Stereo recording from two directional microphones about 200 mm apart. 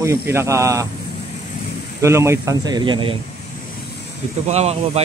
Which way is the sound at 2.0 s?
15° right (ahead or behind).